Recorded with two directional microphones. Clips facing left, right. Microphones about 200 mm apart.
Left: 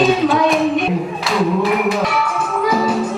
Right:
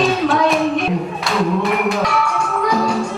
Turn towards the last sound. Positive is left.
turn(degrees=5)  # may be behind; listen again after turning